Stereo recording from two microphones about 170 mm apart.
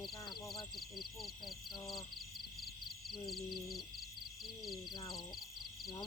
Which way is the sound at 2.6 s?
Centre (ahead or behind).